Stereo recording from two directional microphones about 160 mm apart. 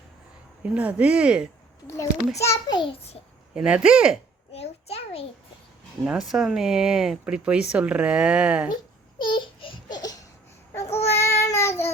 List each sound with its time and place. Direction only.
0.6 s speech: 10° right (ahead or behind)
2.4 s a child's voice: 20° left (ahead or behind); by 3.2 s 40° left (ahead or behind)
3.5 s speech: 5° right (ahead or behind)
4.5 s a sound: 40° left (ahead or behind)
6.1 s speech: 5° right (ahead or behind)
8.7 s a sound: 30° left (ahead or behind)
10.9 s child singing: 15° left (ahead or behind)